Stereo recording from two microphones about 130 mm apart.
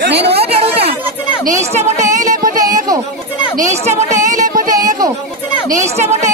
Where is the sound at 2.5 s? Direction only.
30° right (ahead or behind).